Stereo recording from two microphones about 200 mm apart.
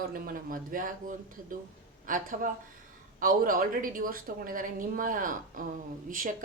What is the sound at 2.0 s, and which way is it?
A woman's voice, 40° right (ahead or behind).